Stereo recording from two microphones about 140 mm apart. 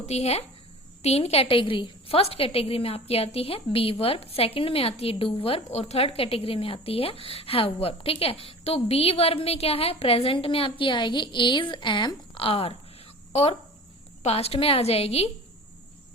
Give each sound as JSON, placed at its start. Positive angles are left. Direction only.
{"t": 0.0, "sound": "a woman's voice", "side_deg": 50}